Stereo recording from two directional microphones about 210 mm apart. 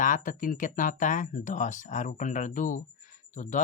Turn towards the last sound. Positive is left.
turn(degrees=35)  # may be behind; listen again after turning